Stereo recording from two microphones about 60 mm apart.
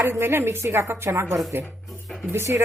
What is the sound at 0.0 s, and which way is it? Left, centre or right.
A woman's voice, right.